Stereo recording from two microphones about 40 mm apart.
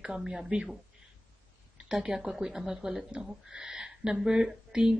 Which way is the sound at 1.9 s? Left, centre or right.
Right.